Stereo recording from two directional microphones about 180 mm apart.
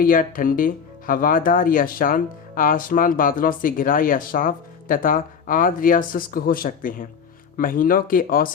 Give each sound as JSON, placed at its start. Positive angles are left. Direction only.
{"t": 0.0, "sound": "speech", "side_deg": 50}